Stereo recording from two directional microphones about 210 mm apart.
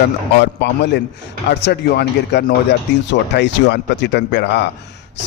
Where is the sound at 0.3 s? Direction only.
55° left (ahead or behind).